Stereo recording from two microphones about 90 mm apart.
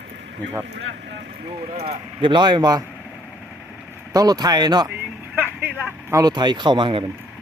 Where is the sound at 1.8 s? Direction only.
70° right (ahead or behind); by 2.8 s 50° right (ahead or behind).